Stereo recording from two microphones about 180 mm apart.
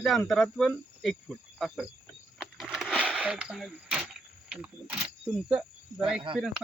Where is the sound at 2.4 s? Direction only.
Centre (ahead or behind).